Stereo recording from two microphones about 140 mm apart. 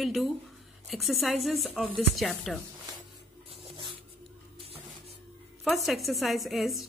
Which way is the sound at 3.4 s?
40° right (ahead or behind).